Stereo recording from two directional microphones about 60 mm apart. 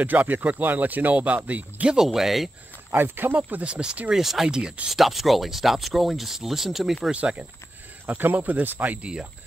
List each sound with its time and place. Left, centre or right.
0.0 s speech: right
1.9 s speech: centre
2.9 s speech: right
3.6 s speech: centre
4.1 s speech: centre
4.9 s speech: centre
7.1 s speech: right
8.1 s speech: right